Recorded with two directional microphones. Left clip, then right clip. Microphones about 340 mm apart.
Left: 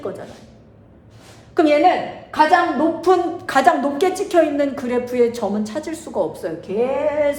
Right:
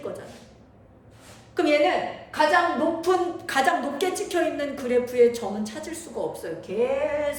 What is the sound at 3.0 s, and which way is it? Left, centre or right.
A woman's voice, centre.